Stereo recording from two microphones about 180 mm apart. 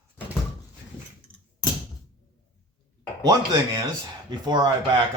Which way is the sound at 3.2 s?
20° right (ahead or behind).